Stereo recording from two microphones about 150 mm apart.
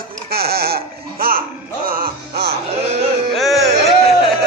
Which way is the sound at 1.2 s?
90° right.